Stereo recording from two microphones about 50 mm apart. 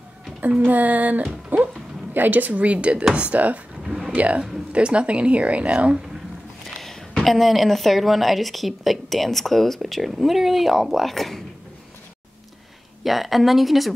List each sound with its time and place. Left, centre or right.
0.4 s a woman's voice: right
3.8 s a sound: centre
4.1 s a woman's voice: right
6.8 s a woman's voice: centre
13.0 s a woman's voice: centre